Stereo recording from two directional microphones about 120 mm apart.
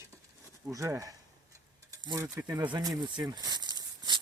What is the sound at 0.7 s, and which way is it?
Speech, 25° right (ahead or behind).